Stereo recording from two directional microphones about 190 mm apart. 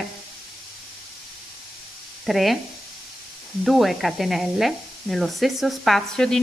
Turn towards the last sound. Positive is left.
turn(degrees=5)  # may be behind; listen again after turning